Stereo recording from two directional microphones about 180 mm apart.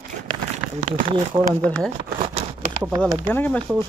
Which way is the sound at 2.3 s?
35° right (ahead or behind).